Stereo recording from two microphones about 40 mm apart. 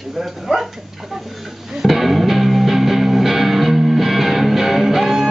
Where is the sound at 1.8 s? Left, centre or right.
Centre.